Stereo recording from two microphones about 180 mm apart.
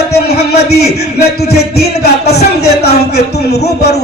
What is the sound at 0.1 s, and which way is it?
A man's voice, 65° left (ahead or behind).